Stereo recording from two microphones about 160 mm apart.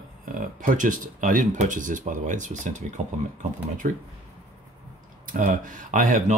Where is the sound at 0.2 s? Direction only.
55° right (ahead or behind).